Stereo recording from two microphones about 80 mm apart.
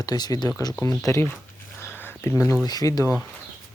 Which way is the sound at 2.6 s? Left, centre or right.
Left.